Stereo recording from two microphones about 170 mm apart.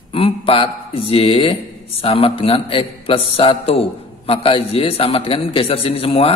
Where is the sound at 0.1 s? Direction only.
35° left (ahead or behind).